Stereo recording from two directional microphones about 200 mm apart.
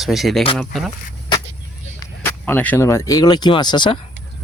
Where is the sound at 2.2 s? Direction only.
10° left (ahead or behind).